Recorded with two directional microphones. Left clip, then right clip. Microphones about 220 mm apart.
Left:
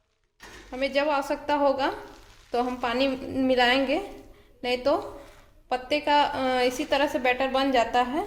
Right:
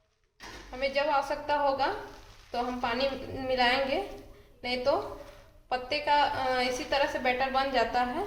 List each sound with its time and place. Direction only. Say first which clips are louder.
0.8 s a woman's voice: left 3 dB; 50° left (ahead or behind)